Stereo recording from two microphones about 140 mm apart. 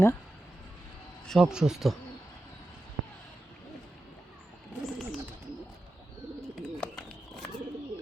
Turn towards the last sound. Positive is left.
turn(degrees=5)  # may be behind; listen again after turning